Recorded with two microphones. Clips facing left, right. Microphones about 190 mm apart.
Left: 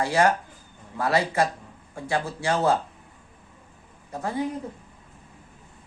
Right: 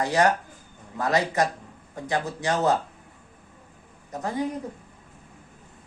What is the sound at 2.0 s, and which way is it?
Speech, 20° right (ahead or behind).